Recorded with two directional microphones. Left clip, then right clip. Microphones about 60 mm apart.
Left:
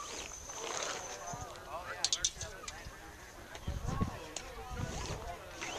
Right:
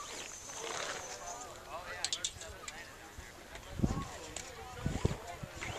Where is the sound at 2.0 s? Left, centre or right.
Left.